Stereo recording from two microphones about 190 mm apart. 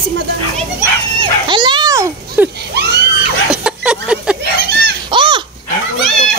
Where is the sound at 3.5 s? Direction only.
5° right (ahead or behind).